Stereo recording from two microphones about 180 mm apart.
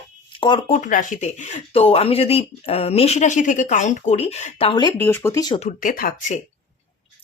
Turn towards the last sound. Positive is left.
turn(degrees=45)  # may be behind; listen again after turning